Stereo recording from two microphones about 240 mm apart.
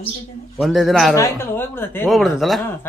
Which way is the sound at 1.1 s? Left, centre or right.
Centre.